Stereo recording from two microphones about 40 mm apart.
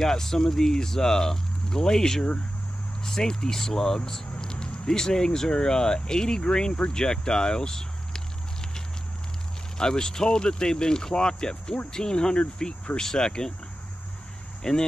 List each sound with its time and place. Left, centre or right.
0.0 s speech: centre
14.6 s speech: centre